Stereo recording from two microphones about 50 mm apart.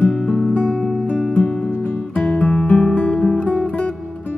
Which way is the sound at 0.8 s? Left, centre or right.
Centre.